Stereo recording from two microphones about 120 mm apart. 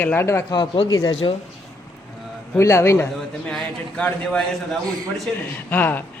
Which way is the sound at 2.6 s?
25° left (ahead or behind).